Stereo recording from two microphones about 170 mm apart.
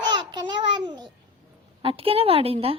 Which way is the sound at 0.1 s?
25° right (ahead or behind).